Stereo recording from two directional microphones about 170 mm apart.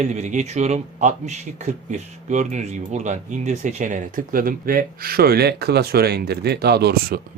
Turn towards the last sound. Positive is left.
turn(degrees=-65)  # may be behind; listen again after turning